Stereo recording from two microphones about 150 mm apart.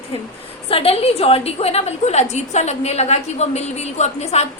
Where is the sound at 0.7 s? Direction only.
40° left (ahead or behind).